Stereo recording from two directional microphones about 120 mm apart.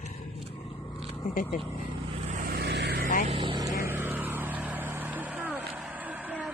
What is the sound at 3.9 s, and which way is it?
Vehicle, 15° right (ahead or behind).